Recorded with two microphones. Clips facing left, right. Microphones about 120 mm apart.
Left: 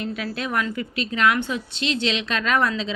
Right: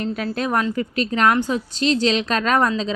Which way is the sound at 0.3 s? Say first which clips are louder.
Right 5 dB; 40° right (ahead or behind).